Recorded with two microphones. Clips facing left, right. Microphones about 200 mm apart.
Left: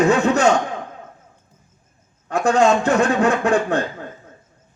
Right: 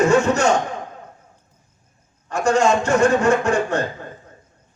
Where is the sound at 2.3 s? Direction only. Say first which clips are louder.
Left 1 dB; 55° left (ahead or behind).